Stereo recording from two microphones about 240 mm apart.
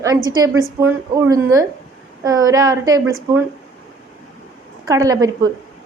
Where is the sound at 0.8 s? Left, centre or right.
Centre.